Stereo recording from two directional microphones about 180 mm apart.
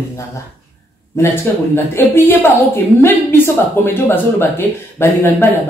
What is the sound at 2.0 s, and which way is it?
A woman's voice, 10° left (ahead or behind).